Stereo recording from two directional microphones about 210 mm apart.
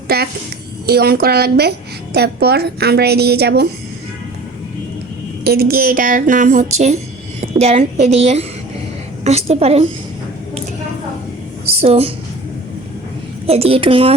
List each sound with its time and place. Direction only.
0.1 s a woman's voice: 45° right (ahead or behind)
5.4 s a woman's voice: 45° right (ahead or behind); by 9.8 s 30° right (ahead or behind)
11.6 s a woman's voice: 30° right (ahead or behind)
13.5 s a woman's voice: 30° right (ahead or behind)